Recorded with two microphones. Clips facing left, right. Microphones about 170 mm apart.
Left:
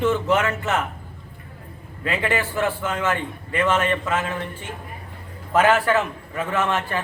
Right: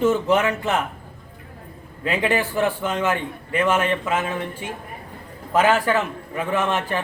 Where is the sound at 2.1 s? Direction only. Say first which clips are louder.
Right 2 dB; 15° right (ahead or behind).